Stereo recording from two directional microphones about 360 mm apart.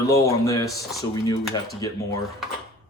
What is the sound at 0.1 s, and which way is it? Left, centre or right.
Speech, centre.